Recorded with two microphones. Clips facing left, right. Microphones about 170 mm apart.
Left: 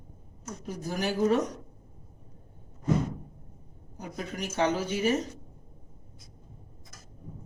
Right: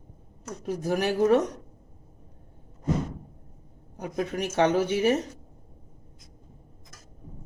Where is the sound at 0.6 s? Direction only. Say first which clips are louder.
Right 6 dB; 65° right (ahead or behind).